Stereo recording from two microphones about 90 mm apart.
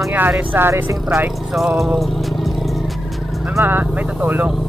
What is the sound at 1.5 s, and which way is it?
Music, centre (ahead or behind).